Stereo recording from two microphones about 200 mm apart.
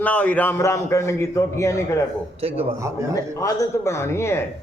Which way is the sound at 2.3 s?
30° right (ahead or behind).